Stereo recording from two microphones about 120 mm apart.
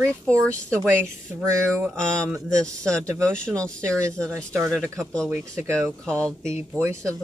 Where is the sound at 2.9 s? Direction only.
25° right (ahead or behind).